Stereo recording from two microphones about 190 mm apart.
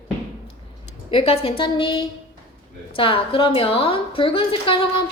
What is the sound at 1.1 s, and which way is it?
A woman's voice, 30° left (ahead or behind).